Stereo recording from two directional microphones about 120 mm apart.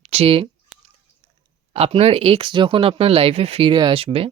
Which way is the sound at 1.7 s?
60° right (ahead or behind).